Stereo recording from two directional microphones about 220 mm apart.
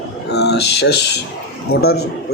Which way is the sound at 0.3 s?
50° left (ahead or behind).